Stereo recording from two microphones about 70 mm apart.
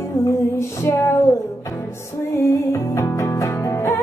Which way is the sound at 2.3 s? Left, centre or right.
Left.